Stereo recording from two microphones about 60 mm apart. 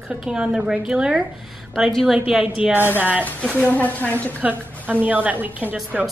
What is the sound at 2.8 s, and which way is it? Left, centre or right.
Speech, right.